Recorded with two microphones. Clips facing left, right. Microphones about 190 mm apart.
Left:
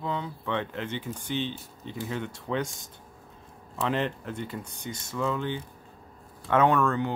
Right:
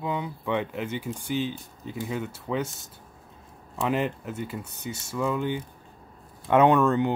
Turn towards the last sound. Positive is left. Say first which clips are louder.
# right 4 dB
turn(degrees=-20)  # may be behind; listen again after turning